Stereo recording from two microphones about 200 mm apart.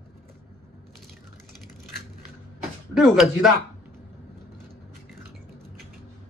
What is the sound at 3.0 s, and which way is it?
Speech, centre (ahead or behind).